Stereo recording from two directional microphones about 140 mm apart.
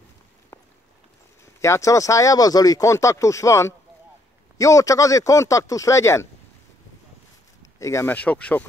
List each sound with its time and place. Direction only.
0.5 s a sound: 25° left (ahead or behind)
1.6 s speech: 20° left (ahead or behind)
7.6 s speech: 20° left (ahead or behind)